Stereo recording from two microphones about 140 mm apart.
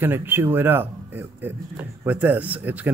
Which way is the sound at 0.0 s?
15° right (ahead or behind).